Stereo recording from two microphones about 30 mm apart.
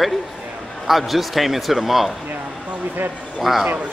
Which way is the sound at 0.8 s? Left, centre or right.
Centre.